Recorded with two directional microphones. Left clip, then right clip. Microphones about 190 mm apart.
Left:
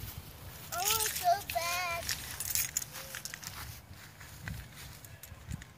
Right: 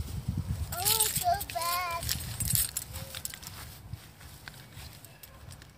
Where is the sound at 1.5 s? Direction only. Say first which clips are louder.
Right 2 dB; 20° left (ahead or behind).